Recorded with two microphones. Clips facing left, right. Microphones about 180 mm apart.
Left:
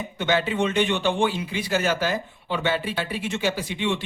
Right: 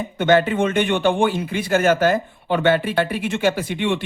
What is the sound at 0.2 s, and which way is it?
A man's voice, 50° right (ahead or behind).